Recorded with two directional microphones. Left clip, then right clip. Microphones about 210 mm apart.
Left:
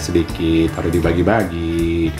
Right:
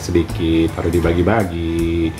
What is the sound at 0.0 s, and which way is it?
Speech, 15° left (ahead or behind).